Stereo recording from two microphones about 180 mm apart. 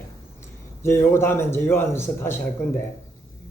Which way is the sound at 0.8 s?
15° left (ahead or behind).